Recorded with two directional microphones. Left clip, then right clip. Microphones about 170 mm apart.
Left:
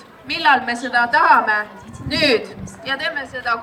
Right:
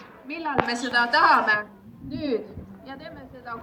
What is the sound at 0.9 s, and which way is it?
A woman's voice, 15° left (ahead or behind).